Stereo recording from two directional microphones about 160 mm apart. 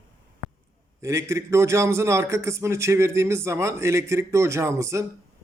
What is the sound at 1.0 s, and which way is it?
A man's voice, 20° right (ahead or behind).